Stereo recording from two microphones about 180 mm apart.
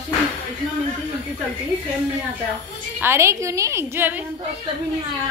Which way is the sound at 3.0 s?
15° right (ahead or behind).